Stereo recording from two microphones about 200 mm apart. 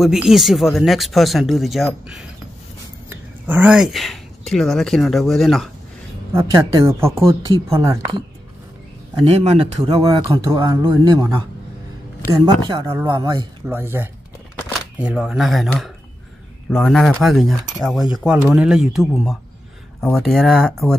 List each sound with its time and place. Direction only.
0.0 s speech: centre (ahead or behind)
3.1 s speech: 10° right (ahead or behind)
6.3 s a woman's voice: 20° right (ahead or behind)
9.2 s speech: 35° right (ahead or behind); by 11.3 s 15° right (ahead or behind)
12.4 s a woman's voice: 20° right (ahead or behind); by 20.9 s centre (ahead or behind)